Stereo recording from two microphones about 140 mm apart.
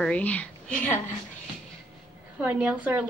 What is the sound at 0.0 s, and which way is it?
Speech, 10° left (ahead or behind).